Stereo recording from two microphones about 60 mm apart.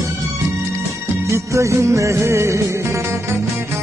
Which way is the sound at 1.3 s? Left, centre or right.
Right.